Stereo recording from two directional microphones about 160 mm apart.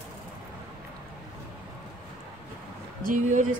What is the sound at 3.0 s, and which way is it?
Speech, 55° right (ahead or behind).